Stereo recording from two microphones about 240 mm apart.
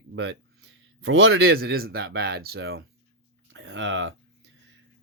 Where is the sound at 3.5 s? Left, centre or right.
Right.